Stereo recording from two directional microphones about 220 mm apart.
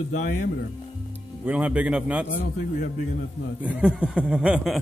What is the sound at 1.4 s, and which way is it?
Speech, 5° right (ahead or behind).